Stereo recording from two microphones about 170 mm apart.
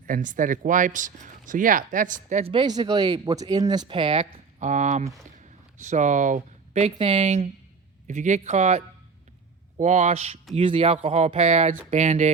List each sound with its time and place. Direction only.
0.1 s speech: 50° right (ahead or behind)
2.4 s speech: 30° right (ahead or behind)